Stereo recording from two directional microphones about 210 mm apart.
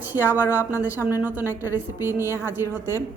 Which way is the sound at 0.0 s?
10° right (ahead or behind).